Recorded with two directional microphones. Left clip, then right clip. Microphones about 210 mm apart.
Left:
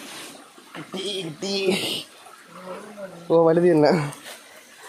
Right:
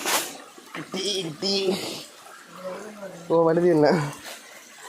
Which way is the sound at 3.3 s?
20° left (ahead or behind).